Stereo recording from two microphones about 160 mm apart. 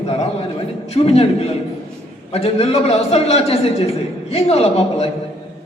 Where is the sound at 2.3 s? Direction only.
40° left (ahead or behind).